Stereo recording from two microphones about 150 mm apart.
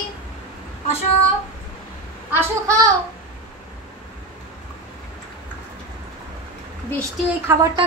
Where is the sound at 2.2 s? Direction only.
15° right (ahead or behind).